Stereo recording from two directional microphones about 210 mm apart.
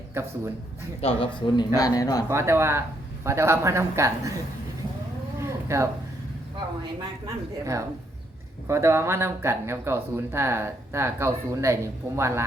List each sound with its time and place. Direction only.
0.1 s a man's voice: 10° right (ahead or behind)
1.0 s speech: 25° left (ahead or behind)
2.3 s speech: 15° right (ahead or behind)
5.4 s a sound: 15° right (ahead or behind)
7.6 s speech: 15° right (ahead or behind)